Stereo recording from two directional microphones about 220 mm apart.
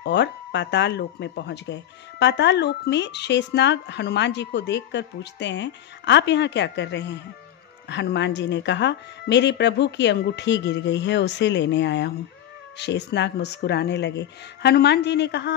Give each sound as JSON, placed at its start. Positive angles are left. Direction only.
{"t": 0.0, "sound": "speech", "side_deg": 50}